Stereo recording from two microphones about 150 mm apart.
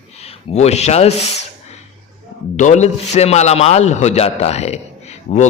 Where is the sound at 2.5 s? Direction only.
50° left (ahead or behind).